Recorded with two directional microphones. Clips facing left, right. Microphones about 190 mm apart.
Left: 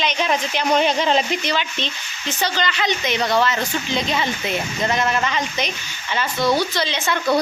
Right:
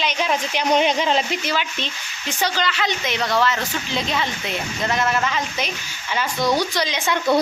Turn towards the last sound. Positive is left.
turn(degrees=-15)  # may be behind; listen again after turning